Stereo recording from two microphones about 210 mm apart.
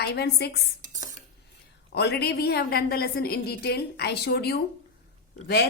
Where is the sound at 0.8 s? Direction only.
35° right (ahead or behind).